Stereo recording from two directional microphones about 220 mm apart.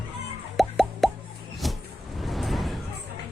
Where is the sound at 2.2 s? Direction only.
Centre (ahead or behind).